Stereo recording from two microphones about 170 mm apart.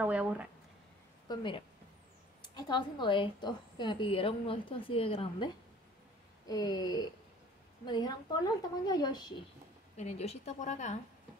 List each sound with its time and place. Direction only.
0.0 s speech: 10° right (ahead or behind)
1.3 s a woman's voice: 30° left (ahead or behind)
9.9 s a woman's voice: 40° left (ahead or behind)